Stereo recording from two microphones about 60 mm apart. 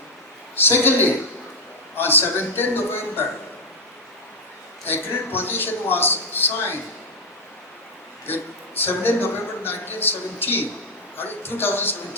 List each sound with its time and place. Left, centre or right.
0.5 s speech: left
4.9 s speech: left
8.3 s speech: left